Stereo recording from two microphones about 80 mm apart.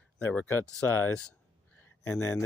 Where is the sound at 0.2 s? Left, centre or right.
Centre.